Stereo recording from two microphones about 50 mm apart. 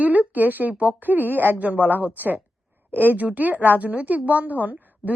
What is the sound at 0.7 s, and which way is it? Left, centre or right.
A woman's voice, right.